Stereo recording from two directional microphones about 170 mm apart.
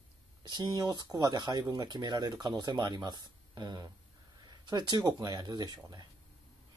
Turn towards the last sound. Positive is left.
turn(degrees=-25)  # may be behind; listen again after turning